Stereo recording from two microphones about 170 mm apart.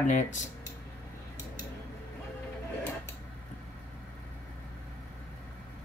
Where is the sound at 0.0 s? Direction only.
45° left (ahead or behind).